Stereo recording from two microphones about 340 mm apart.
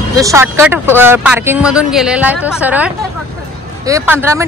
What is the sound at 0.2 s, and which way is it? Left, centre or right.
Speech, centre.